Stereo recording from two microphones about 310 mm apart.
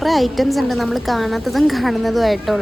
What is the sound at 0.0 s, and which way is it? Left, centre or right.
A woman's voice, centre.